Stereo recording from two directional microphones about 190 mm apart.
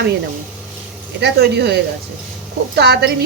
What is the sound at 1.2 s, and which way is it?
Speech, 60° right (ahead or behind).